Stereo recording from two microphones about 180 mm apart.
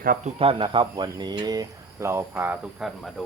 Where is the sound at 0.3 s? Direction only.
30° right (ahead or behind).